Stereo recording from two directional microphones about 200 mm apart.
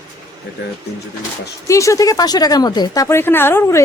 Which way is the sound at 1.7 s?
15° left (ahead or behind).